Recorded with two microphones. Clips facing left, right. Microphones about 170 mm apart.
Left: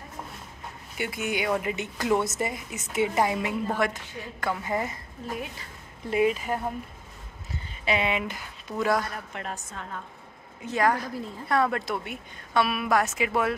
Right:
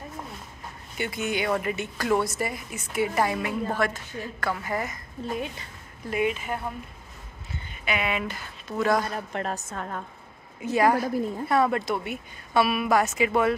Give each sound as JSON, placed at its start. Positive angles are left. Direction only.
{"t": 0.9, "sound": "speech", "side_deg": 10}
{"t": 6.0, "sound": "speech", "side_deg": 30}
{"t": 9.3, "sound": "a woman's voice", "side_deg": -40}
{"t": 10.6, "sound": "a woman's voice", "side_deg": -10}